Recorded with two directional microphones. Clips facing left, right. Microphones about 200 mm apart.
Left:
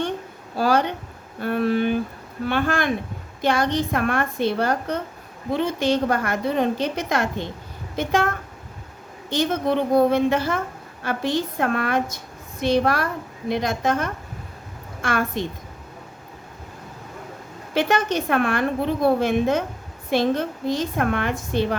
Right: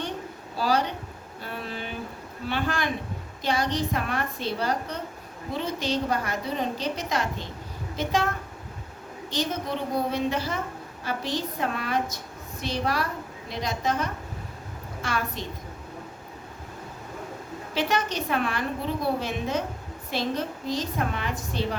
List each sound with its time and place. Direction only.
0.5 s speech: 55° left (ahead or behind)
1.4 s a sound: 60° left (ahead or behind)
2.5 s a woman's voice: 50° left (ahead or behind)
9.3 s a woman's voice: 55° left (ahead or behind)
17.7 s a woman's voice: 55° left (ahead or behind)